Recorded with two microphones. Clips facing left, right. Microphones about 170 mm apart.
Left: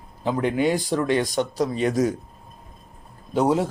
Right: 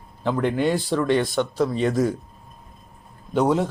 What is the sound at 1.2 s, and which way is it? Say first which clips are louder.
Speech: right 1 dB; 40° left (ahead or behind).